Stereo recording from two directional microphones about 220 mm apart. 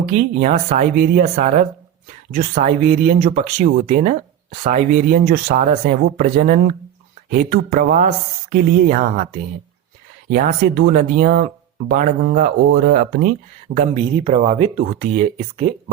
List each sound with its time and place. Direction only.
0.0 s speech: 40° right (ahead or behind)
10.3 s speech: 40° right (ahead or behind)
13.7 s speech: 30° right (ahead or behind)